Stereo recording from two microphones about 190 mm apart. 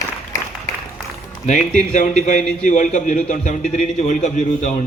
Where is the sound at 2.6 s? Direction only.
40° left (ahead or behind).